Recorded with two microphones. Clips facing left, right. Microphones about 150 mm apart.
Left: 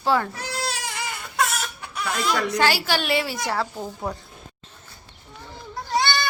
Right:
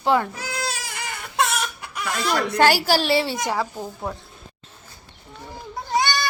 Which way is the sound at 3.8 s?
Centre (ahead or behind).